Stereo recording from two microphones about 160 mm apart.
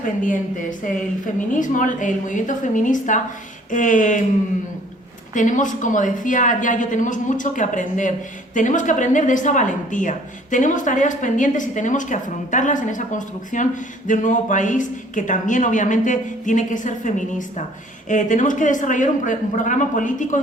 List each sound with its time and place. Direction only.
0.0 s a woman's voice: 55° left (ahead or behind)
5.3 s a woman's voice: 55° left (ahead or behind)